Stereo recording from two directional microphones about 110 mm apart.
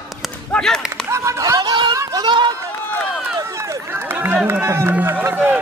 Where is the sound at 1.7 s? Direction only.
45° right (ahead or behind).